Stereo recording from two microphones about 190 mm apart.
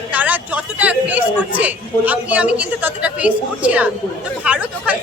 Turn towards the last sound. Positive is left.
turn(degrees=-5)  # may be behind; listen again after turning